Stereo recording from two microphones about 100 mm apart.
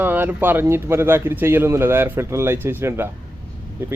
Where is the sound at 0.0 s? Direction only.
20° right (ahead or behind).